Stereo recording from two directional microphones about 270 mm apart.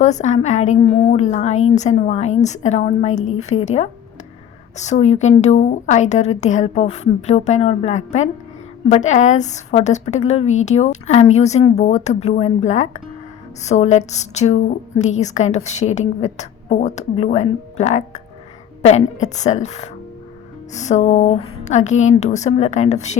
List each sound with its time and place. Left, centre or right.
0.0 s a woman's voice: left